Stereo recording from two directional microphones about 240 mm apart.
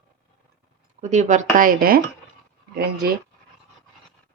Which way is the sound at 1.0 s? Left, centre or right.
Right.